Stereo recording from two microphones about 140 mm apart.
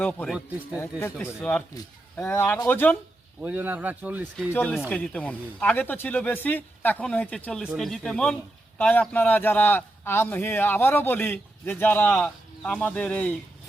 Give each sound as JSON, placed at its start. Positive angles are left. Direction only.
{"t": 0.0, "sound": "a man's voice", "side_deg": 10}
{"t": 3.4, "sound": "speech", "side_deg": -10}
{"t": 4.5, "sound": "a man's voice", "side_deg": 15}